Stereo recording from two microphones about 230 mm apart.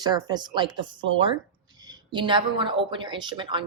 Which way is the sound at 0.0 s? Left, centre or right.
Centre.